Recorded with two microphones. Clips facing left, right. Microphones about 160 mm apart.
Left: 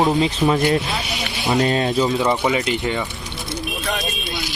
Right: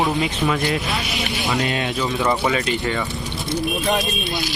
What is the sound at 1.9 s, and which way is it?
Speech, 20° left (ahead or behind).